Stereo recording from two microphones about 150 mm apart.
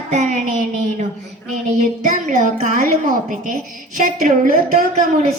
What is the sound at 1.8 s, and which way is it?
A woman's voice, 55° right (ahead or behind).